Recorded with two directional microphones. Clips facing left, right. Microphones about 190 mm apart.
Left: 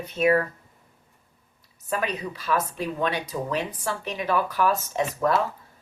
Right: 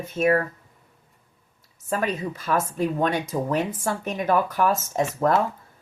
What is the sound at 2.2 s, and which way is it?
Speech, 45° right (ahead or behind).